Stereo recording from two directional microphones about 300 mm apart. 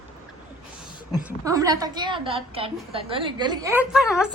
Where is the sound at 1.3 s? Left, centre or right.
Centre.